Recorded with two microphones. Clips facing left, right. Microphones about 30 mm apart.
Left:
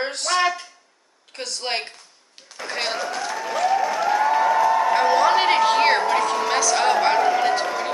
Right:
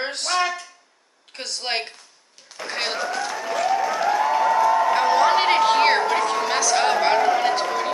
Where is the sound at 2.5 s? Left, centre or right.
Centre.